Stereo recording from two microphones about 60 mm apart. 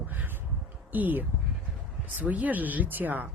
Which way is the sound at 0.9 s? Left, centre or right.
Right.